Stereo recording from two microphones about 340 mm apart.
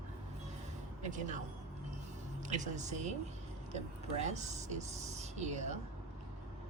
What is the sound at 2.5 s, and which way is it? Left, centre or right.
Speech, right.